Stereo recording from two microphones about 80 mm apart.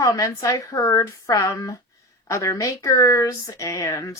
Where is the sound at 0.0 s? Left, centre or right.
Left.